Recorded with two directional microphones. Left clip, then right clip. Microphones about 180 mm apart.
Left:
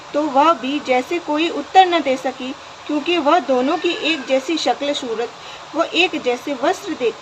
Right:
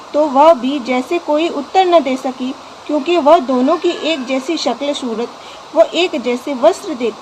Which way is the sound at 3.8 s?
50° right (ahead or behind).